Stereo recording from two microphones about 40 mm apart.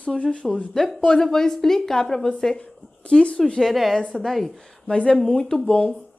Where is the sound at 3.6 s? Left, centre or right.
Centre.